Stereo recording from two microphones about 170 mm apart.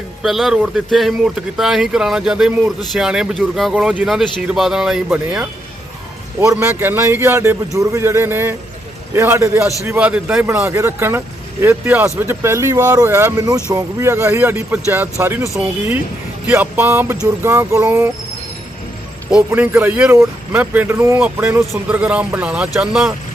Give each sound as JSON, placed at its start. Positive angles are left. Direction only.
{"t": 0.2, "sound": "speech", "side_deg": 0}
{"t": 19.3, "sound": "speech", "side_deg": -10}